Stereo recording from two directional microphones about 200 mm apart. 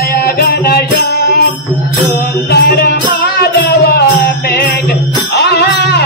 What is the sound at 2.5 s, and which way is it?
Music, 55° left (ahead or behind).